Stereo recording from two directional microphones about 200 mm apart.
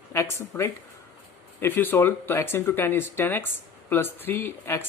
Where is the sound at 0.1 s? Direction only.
10° left (ahead or behind).